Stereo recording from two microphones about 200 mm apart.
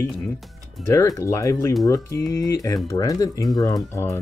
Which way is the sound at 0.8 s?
15° left (ahead or behind).